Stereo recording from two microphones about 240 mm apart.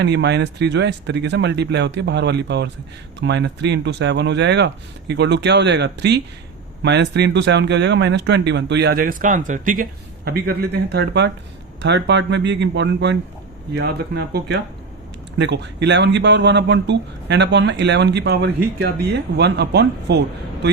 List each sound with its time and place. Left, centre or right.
0.0 s speech: right